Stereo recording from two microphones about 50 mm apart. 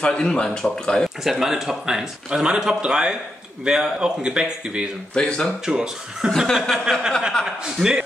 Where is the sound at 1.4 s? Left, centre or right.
Centre.